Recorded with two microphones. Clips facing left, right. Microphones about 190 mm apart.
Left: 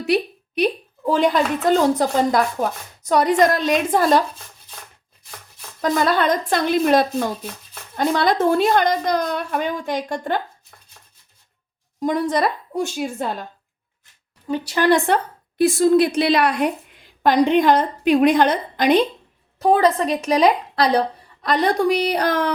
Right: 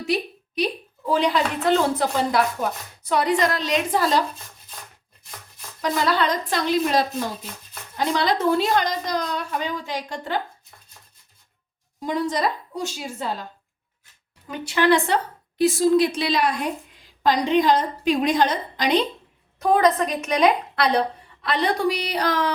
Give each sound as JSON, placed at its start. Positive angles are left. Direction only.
{"t": 0.0, "sound": "a sound", "side_deg": 60}
{"t": 1.1, "sound": "a woman's voice", "side_deg": 45}
{"t": 5.8, "sound": "a woman's voice", "side_deg": 50}
{"t": 12.0, "sound": "a woman's voice", "side_deg": 55}
{"t": 14.4, "sound": "a woman's voice", "side_deg": 30}
{"t": 14.8, "sound": "a woman's voice", "side_deg": 45}
{"t": 19.5, "sound": "a woman's voice", "side_deg": 30}